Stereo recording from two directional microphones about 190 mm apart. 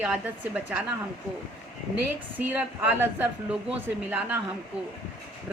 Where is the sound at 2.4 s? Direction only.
10° right (ahead or behind).